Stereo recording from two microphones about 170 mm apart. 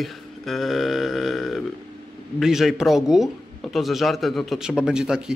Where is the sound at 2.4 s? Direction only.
Centre (ahead or behind).